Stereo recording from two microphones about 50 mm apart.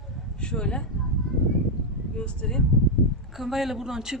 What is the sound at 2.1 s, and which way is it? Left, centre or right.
Speech, centre.